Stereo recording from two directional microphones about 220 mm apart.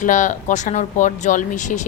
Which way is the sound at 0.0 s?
35° left (ahead or behind).